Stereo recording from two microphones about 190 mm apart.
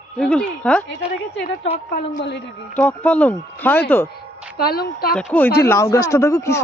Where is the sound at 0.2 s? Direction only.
5° left (ahead or behind).